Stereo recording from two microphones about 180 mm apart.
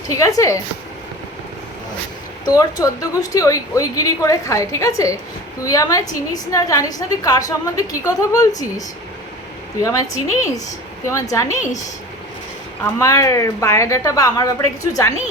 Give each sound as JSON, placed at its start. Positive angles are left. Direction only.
{"t": 0.1, "sound": "a woman's voice", "side_deg": 20}
{"t": 2.4, "sound": "a woman's voice", "side_deg": 20}
{"t": 9.8, "sound": "a woman's voice", "side_deg": 15}
{"t": 12.8, "sound": "a woman's voice", "side_deg": 20}